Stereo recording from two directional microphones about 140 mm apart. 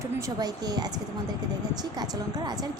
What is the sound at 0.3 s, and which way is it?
A woman's voice, 30° right (ahead or behind).